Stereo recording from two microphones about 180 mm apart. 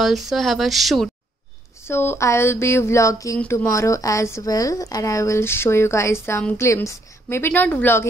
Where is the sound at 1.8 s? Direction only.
15° left (ahead or behind).